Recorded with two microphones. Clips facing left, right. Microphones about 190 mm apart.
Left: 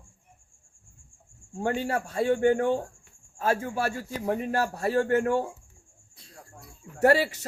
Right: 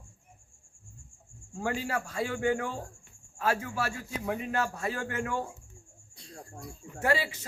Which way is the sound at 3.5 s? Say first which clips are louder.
Left 4 dB; 30° left (ahead or behind).